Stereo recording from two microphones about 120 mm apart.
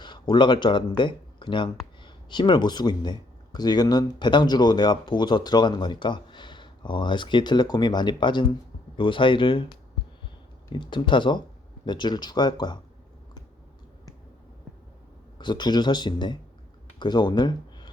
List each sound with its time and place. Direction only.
0.0 s speech: 40° left (ahead or behind)
15.4 s speech: 40° left (ahead or behind)